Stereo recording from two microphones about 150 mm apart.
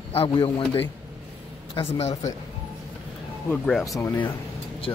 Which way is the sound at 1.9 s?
45° left (ahead or behind).